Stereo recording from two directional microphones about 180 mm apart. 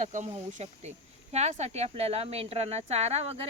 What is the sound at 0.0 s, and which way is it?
Speech, 40° right (ahead or behind).